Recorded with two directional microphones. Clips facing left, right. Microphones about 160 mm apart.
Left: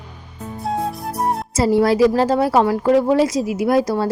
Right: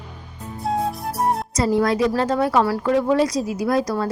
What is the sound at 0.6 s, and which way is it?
Flute, centre (ahead or behind).